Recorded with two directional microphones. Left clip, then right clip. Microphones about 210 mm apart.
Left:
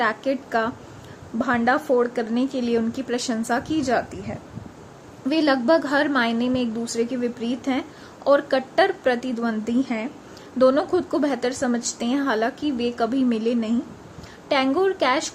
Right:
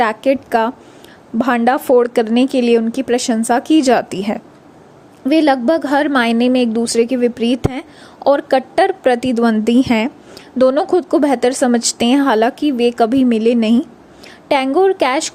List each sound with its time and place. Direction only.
0.0 s a woman's voice: 35° right (ahead or behind)
5.3 s a woman's voice: 30° right (ahead or behind)